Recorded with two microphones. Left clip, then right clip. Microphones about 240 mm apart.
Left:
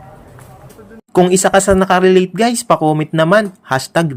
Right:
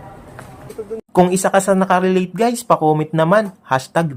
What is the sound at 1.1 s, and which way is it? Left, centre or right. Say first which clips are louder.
Speech: left 3 dB; centre.